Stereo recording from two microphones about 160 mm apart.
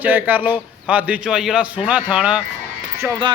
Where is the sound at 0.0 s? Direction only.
10° right (ahead or behind).